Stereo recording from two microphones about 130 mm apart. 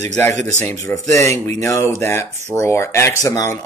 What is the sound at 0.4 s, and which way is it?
Speech, 65° right (ahead or behind).